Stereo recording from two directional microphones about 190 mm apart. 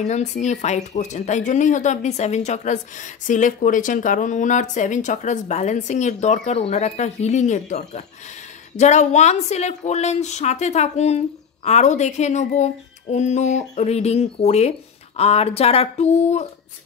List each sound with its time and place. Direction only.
0.0 s speech: 35° left (ahead or behind)